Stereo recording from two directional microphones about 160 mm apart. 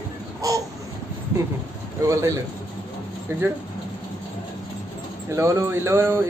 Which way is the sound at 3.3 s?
15° right (ahead or behind).